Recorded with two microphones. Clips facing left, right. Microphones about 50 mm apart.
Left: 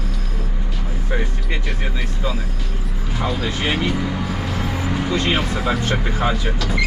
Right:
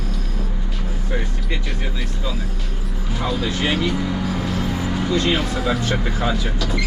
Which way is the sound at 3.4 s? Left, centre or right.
Centre.